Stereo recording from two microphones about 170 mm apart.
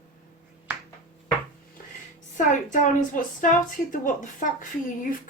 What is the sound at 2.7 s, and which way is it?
A woman's voice, 50° left (ahead or behind).